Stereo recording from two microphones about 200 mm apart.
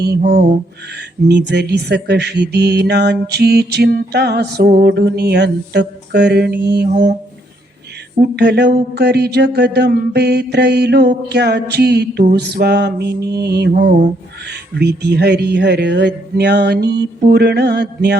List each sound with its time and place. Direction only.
0.3 s a sound: 55° right (ahead or behind)
1.3 s mantra: 55° right (ahead or behind)
8.2 s mantra: 55° right (ahead or behind)
14.8 s mantra: 55° right (ahead or behind)